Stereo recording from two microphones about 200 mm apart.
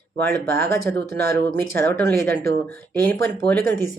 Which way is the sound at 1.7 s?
10° left (ahead or behind).